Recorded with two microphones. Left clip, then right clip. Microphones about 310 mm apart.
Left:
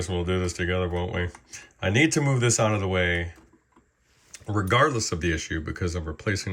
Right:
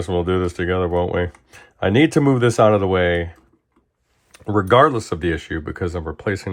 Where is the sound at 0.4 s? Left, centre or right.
Centre.